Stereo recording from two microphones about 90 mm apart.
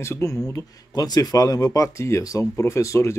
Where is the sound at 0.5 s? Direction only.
40° left (ahead or behind).